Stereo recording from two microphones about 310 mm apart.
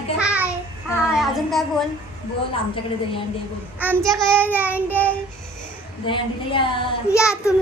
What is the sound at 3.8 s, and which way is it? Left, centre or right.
Child singing, centre.